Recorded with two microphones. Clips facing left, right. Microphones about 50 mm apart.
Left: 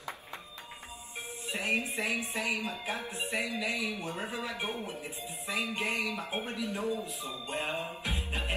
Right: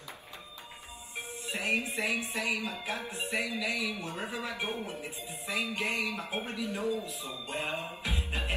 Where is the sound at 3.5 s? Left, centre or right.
Left.